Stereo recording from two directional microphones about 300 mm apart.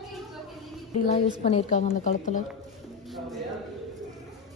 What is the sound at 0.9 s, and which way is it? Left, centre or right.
A woman's voice, left.